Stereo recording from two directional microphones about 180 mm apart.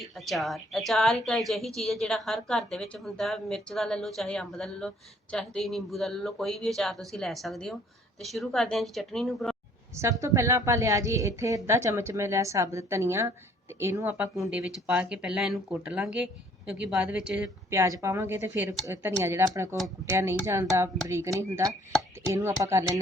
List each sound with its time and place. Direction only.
0.3 s a woman's voice: centre (ahead or behind)
9.9 s a woman's voice: 15° right (ahead or behind)